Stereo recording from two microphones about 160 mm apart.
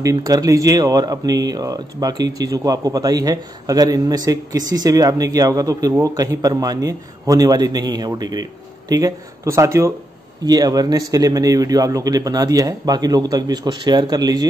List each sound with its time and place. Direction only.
0.0 s speech: 20° right (ahead or behind)